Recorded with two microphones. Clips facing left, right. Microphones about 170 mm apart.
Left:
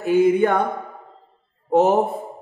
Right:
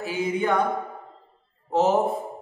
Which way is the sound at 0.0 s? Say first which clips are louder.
Left 9 dB; 55° left (ahead or behind).